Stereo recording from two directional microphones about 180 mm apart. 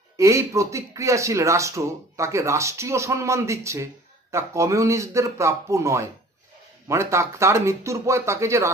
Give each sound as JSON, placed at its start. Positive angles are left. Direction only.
{"t": 0.2, "sound": "speech", "side_deg": -15}